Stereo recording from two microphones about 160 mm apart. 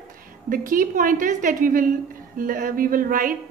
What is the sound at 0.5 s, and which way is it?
A woman's voice, 60° right (ahead or behind).